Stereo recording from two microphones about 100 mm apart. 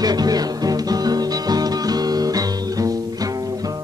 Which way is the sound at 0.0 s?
40° right (ahead or behind).